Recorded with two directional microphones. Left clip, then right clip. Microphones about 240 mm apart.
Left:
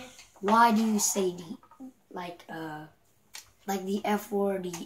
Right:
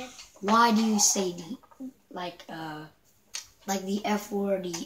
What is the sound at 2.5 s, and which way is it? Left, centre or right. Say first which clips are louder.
Speech: right 1 dB; centre.